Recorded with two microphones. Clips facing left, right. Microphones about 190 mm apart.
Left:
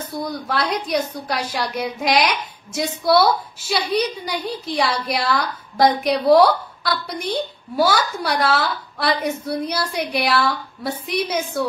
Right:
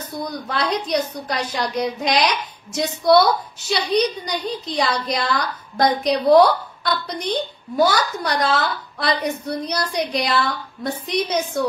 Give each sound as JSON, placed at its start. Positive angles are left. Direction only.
{"t": 0.2, "sound": "a woman's voice", "side_deg": 5}